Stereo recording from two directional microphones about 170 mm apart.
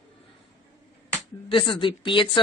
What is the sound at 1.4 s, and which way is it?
Speech, 30° left (ahead or behind).